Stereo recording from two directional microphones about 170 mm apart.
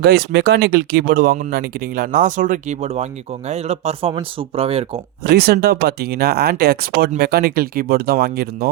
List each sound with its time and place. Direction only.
0.0 s speech: 65° right (ahead or behind); by 4.9 s 35° right (ahead or behind)
5.2 s speech: 65° right (ahead or behind)